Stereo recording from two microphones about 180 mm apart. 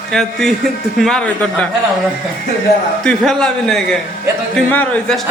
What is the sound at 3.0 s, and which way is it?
A man's voice, 5° left (ahead or behind).